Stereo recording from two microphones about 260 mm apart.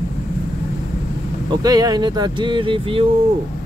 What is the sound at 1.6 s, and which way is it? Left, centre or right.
Speech, centre.